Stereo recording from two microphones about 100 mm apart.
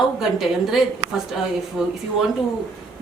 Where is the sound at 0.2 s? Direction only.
5° right (ahead or behind).